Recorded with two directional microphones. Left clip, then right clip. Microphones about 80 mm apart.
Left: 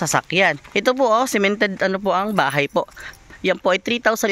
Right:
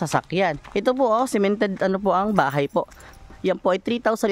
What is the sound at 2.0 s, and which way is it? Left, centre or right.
Speech, right.